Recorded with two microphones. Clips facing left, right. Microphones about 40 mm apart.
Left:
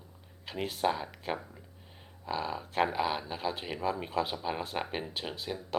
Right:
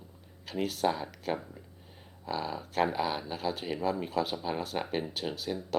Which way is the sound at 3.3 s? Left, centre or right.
Centre.